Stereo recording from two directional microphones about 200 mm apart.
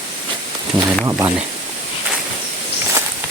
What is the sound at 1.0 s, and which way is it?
Speech, 15° right (ahead or behind).